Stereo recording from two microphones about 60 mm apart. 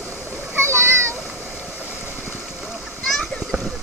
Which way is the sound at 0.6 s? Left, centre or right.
Right.